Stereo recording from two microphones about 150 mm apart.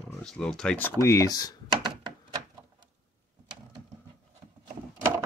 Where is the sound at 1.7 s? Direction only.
30° right (ahead or behind).